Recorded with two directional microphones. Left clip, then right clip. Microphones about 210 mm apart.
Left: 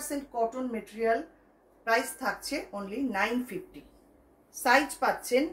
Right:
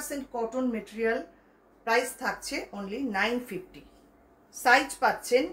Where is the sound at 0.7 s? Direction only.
5° right (ahead or behind).